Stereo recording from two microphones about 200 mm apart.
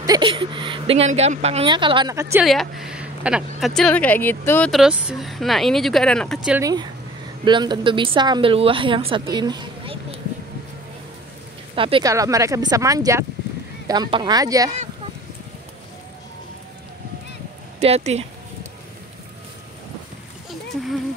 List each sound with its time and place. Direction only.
0.0 s a woman's voice: 20° right (ahead or behind)
2.4 s speech: centre (ahead or behind)
6.6 s a woman's voice: 20° right (ahead or behind)
11.7 s a woman's voice: 25° right (ahead or behind)
17.7 s a sound: 30° right (ahead or behind)